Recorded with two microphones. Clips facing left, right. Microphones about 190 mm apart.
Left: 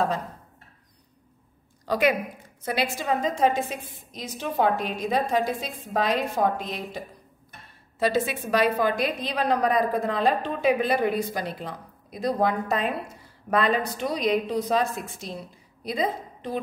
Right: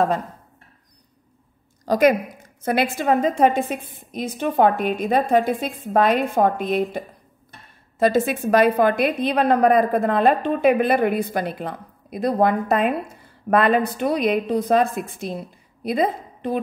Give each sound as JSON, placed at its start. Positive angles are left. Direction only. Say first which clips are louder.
{"t": 1.9, "sound": "a woman's voice", "louder": "right 6 dB", "side_deg": -45}
{"t": 8.0, "sound": "a woman's voice", "louder": "right 6 dB", "side_deg": -50}